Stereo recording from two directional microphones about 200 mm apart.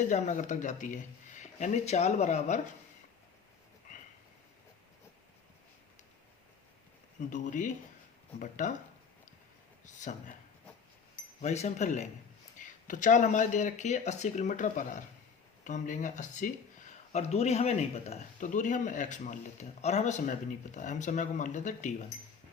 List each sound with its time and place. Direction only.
0.1 s speech: 35° left (ahead or behind)
7.2 s speech: 40° left (ahead or behind)
9.8 s speech: 40° left (ahead or behind)
11.3 s speech: 35° left (ahead or behind)